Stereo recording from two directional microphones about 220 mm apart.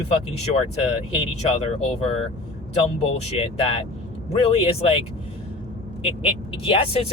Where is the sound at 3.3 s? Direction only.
25° left (ahead or behind).